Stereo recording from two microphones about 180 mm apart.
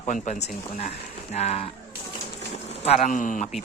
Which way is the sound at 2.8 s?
40° left (ahead or behind).